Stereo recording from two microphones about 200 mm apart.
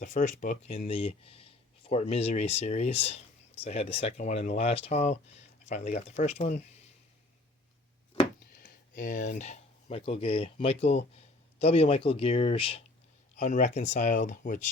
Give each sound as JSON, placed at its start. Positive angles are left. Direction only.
{"t": 0.0, "sound": "speech", "side_deg": 40}
{"t": 0.9, "sound": "speech", "side_deg": 30}
{"t": 8.5, "sound": "speech", "side_deg": 45}
{"t": 13.3, "sound": "speech", "side_deg": 40}